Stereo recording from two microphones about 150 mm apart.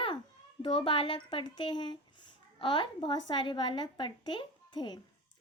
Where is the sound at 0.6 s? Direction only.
35° left (ahead or behind).